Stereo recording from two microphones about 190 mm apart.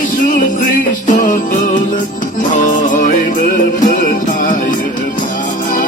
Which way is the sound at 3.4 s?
45° left (ahead or behind).